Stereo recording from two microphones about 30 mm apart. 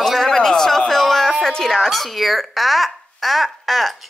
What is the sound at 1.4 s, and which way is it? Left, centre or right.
Speech, centre.